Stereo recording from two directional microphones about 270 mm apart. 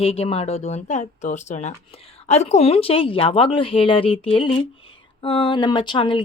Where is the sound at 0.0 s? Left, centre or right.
Left.